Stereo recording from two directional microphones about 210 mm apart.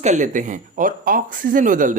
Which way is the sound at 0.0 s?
35° right (ahead or behind).